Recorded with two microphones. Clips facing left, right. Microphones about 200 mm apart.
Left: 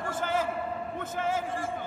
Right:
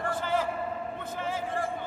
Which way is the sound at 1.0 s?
50° left (ahead or behind).